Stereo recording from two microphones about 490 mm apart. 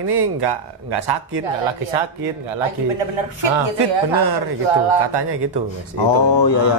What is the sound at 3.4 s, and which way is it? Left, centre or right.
Speech, right.